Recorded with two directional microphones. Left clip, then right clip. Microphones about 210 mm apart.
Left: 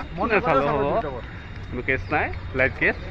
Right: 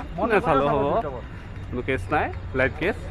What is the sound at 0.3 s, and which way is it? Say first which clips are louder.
Speech: even; 15° right (ahead or behind).